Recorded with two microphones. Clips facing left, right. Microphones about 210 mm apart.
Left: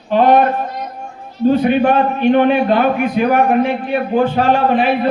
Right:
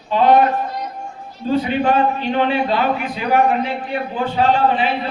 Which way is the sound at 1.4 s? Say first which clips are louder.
Left 5 dB; 60° left (ahead or behind).